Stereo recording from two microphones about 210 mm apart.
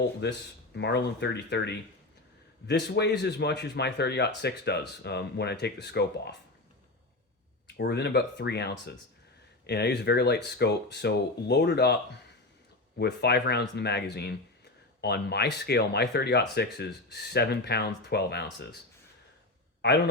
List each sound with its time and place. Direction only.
0.2 s speech: 55° left (ahead or behind)
7.8 s speech: 50° left (ahead or behind)
19.8 s a man's voice: 50° left (ahead or behind)